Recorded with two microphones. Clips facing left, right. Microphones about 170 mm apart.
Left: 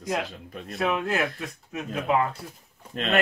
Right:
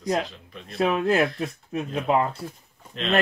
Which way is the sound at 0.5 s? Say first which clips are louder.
Left 4 dB; 45° left (ahead or behind).